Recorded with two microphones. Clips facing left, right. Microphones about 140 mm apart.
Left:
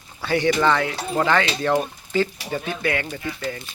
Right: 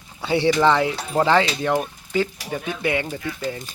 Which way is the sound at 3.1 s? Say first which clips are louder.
Right 1 dB; 5° right (ahead or behind).